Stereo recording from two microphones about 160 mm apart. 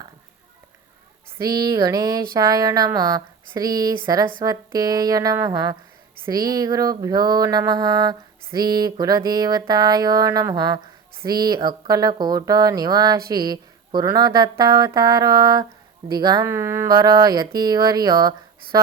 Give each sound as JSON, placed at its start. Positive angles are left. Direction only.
{"t": 1.4, "sound": "mantra", "side_deg": -20}